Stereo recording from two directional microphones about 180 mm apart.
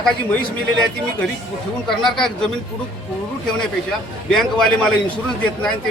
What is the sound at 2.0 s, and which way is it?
Speech, centre (ahead or behind).